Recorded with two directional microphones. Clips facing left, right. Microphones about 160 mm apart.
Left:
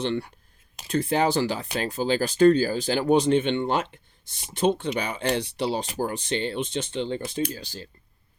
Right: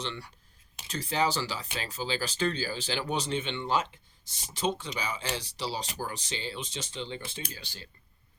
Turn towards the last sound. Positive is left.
turn(degrees=40)  # may be behind; listen again after turning